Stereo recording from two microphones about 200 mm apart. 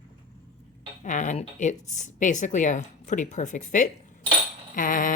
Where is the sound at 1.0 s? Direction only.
40° left (ahead or behind).